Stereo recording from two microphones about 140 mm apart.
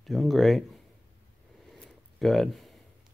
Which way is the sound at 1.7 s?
Centre (ahead or behind).